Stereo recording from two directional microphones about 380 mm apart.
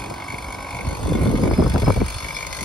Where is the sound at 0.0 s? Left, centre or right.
Centre.